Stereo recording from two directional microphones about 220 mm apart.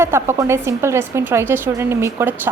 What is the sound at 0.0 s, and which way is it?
A woman's voice, 10° right (ahead or behind).